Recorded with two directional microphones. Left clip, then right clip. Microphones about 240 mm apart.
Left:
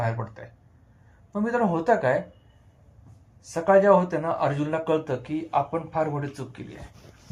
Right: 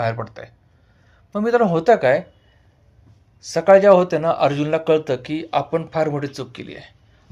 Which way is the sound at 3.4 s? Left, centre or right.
Right.